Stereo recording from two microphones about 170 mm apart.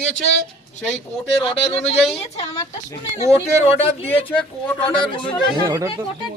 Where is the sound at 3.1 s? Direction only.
40° left (ahead or behind).